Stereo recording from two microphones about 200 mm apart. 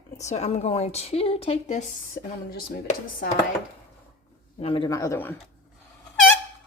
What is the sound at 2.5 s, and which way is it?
Speech, 50° left (ahead or behind).